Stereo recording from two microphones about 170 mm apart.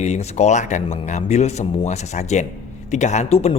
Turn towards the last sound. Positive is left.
turn(degrees=40)  # may be behind; listen again after turning